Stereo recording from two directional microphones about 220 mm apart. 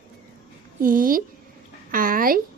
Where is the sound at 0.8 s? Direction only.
40° right (ahead or behind).